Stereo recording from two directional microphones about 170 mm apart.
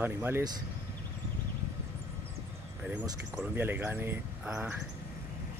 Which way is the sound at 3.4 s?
10° right (ahead or behind).